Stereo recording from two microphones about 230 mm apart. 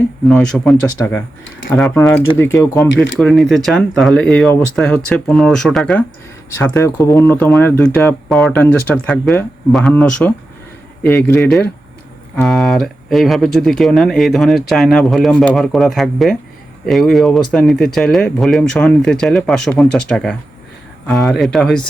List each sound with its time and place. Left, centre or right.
0.3 s speech: centre
3.2 s speech: centre